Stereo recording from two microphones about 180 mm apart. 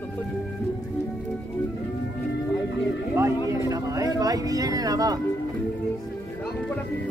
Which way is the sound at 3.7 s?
20° right (ahead or behind).